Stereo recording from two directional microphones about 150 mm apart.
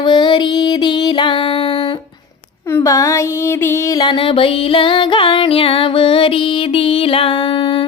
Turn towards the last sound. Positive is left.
turn(degrees=35)  # may be behind; listen again after turning